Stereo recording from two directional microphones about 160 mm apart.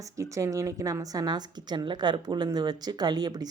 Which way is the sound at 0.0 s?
20° right (ahead or behind).